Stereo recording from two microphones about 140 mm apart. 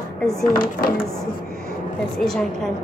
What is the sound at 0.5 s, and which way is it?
Speech, 90° left.